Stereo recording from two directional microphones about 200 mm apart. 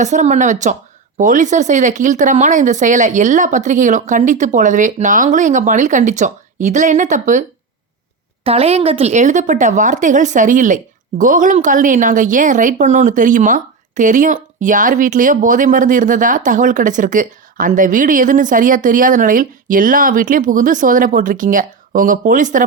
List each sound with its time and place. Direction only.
0.0 s a woman's voice: 35° right (ahead or behind)
8.4 s a woman's voice: 30° right (ahead or behind)